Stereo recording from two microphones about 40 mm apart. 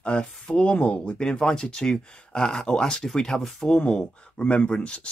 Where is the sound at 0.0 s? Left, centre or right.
Left; by 3.8 s centre.